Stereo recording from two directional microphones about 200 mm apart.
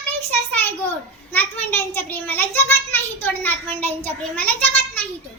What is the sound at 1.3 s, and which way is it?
A child's voice, 10° left (ahead or behind).